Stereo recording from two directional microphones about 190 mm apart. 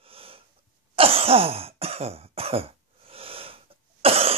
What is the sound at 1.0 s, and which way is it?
Throat clearing, 30° right (ahead or behind).